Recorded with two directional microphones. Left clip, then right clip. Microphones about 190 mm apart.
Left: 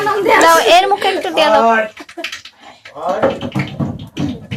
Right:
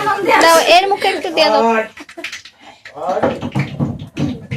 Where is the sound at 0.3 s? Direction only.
5° right (ahead or behind).